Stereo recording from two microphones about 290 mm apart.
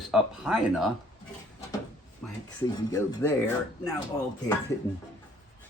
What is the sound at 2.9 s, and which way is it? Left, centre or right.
Speech, centre.